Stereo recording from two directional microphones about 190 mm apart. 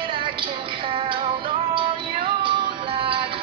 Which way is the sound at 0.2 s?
25° right (ahead or behind).